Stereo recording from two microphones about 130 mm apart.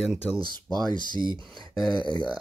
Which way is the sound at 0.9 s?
35° left (ahead or behind).